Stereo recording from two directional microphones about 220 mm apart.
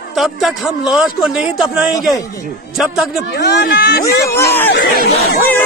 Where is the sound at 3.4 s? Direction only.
45° left (ahead or behind).